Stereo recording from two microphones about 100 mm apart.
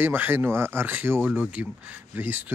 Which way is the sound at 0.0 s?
20° right (ahead or behind).